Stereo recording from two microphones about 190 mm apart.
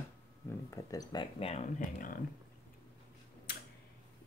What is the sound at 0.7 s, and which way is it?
Speech, 20° left (ahead or behind).